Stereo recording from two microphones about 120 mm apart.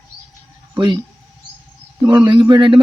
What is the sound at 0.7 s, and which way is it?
Speech, 40° right (ahead or behind).